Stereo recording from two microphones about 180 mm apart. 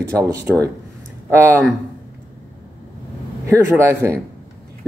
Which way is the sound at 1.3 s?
15° right (ahead or behind).